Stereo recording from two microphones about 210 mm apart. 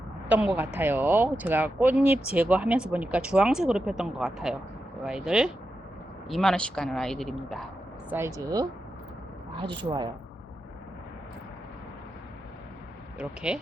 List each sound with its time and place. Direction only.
0.3 s a woman's voice: 5° right (ahead or behind)
8.4 s a woman's voice: 15° right (ahead or behind)
13.1 s speech: 5° right (ahead or behind)